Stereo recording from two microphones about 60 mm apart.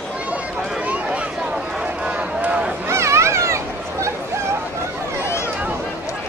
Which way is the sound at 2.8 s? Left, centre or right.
Right.